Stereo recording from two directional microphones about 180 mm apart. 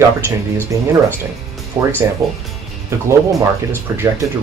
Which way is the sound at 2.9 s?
15° right (ahead or behind).